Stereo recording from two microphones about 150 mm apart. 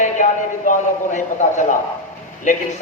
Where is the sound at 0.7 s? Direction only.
55° left (ahead or behind).